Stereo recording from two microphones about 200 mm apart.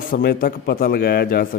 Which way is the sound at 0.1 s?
50° left (ahead or behind).